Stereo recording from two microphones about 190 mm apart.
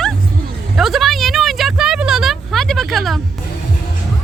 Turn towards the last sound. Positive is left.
turn(degrees=0)  # may be behind; listen again after turning